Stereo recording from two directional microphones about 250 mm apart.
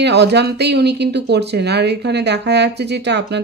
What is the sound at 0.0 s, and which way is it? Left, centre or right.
Speech, right.